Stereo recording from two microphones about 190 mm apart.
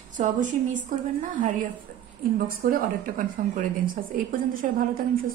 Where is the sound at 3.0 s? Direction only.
45° right (ahead or behind).